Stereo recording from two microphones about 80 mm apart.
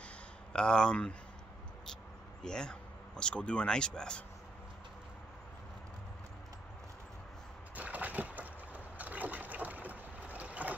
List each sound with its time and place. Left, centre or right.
0.5 s speech: centre
2.4 s speech: centre
7.7 s boat: centre